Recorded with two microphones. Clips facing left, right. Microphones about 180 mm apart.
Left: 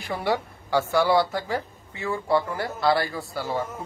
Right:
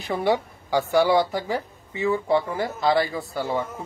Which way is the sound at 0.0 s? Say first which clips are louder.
Right 3 dB; 20° right (ahead or behind).